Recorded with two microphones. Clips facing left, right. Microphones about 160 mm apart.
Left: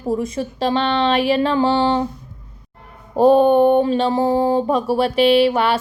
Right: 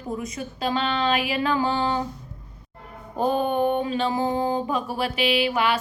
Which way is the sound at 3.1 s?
30° left (ahead or behind).